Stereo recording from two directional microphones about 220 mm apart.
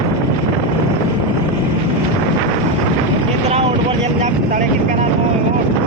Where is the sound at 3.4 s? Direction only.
30° right (ahead or behind).